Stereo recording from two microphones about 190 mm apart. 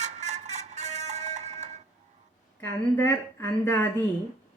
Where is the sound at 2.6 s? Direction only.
10° left (ahead or behind).